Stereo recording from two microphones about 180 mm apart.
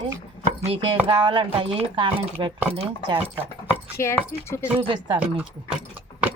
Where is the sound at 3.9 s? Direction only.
15° left (ahead or behind).